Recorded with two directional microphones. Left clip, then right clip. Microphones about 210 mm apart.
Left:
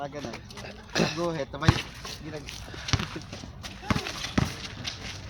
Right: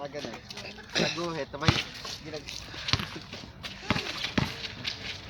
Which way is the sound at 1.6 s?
35° right (ahead or behind).